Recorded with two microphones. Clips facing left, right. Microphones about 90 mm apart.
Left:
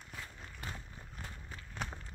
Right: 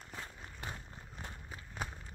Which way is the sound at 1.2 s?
15° right (ahead or behind).